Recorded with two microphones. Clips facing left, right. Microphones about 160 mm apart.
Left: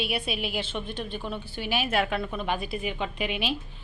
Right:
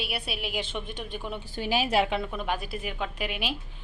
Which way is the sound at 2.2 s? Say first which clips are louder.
Left 1 dB; 5° right (ahead or behind).